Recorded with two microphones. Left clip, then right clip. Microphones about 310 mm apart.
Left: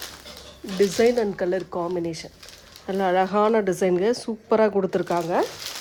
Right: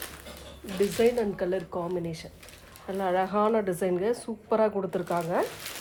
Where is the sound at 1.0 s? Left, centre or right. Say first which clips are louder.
Left 3 dB; left.